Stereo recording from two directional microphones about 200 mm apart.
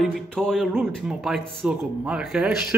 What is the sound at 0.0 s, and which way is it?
Speech, centre (ahead or behind).